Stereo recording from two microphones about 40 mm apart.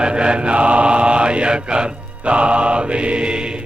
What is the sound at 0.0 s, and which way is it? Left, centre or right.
Mantra, right.